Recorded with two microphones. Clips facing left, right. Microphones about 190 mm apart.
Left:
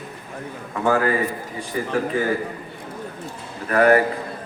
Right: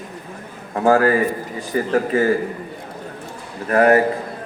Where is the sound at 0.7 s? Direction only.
40° right (ahead or behind).